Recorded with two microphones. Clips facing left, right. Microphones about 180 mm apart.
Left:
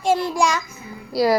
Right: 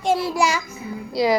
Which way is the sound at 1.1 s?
5° left (ahead or behind).